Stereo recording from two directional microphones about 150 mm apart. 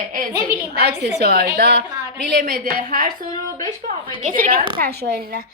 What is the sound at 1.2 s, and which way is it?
Speech, 90° right.